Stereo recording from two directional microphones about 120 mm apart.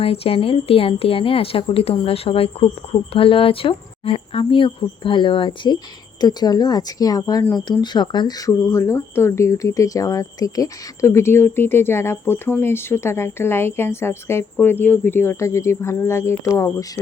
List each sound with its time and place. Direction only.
0.0 s a woman's voice: 55° left (ahead or behind); by 17.0 s 25° left (ahead or behind)